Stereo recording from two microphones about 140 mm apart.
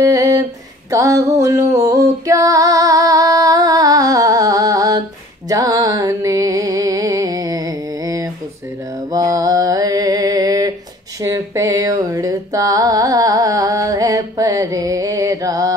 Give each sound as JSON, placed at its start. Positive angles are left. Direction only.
{"t": 0.0, "sound": "a sound", "side_deg": -25}
{"t": 5.5, "sound": "music", "side_deg": -25}
{"t": 9.1, "sound": "mantra", "side_deg": -25}
{"t": 11.1, "sound": "music", "side_deg": -25}